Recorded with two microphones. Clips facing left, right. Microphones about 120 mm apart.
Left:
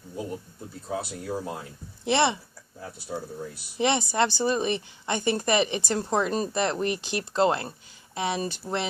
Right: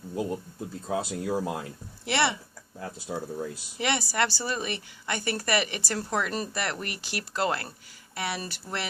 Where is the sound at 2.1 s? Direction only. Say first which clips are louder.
Left 4 dB; 20° left (ahead or behind).